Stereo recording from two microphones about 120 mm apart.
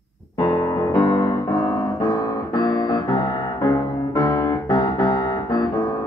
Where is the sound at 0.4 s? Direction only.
30° left (ahead or behind).